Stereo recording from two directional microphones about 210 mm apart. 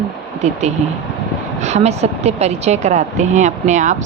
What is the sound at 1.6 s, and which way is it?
Speech, 30° right (ahead or behind).